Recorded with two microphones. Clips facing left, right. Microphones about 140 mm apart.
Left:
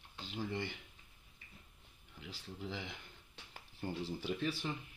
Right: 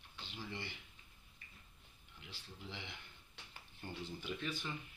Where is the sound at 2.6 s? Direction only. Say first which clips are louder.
Left 6 dB; 40° left (ahead or behind).